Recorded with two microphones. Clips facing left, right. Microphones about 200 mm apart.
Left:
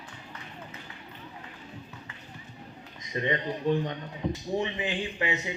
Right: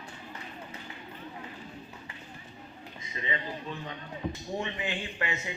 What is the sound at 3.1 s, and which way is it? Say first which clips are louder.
Speech: left 7 dB; 55° left (ahead or behind).